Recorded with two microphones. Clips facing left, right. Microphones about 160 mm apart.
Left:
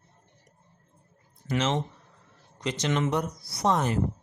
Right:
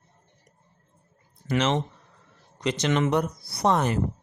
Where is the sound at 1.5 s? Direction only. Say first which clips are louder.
Right 3 dB; 70° right (ahead or behind).